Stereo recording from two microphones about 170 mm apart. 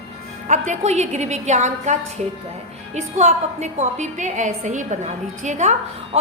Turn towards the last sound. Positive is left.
turn(degrees=-45)  # may be behind; listen again after turning